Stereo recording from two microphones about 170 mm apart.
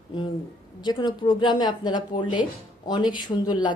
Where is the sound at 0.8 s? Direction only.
25° left (ahead or behind).